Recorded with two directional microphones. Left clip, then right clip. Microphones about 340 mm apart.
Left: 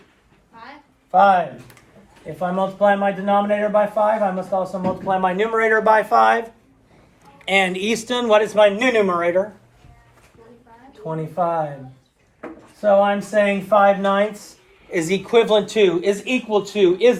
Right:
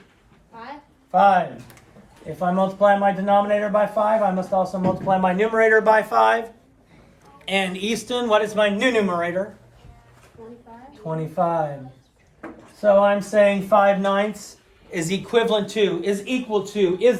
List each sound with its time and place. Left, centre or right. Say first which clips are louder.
1.1 s speech: left 2 dB; centre
7.4 s speech: left 5 dB; centre
11.0 s speech: left 1 dB; centre
12.8 s speech: even; centre; by 17.2 s left